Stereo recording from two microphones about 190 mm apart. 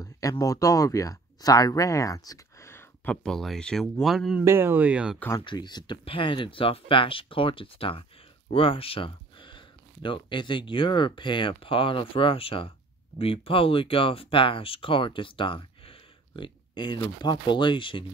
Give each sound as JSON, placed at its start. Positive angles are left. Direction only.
{"t": 0.0, "sound": "speech", "side_deg": 20}
{"t": 5.4, "sound": "speech", "side_deg": 25}